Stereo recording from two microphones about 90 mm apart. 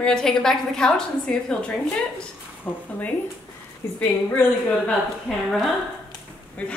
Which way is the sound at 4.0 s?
15° left (ahead or behind).